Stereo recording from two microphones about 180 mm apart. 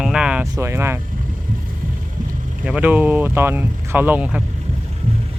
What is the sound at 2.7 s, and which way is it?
Speech, 10° right (ahead or behind).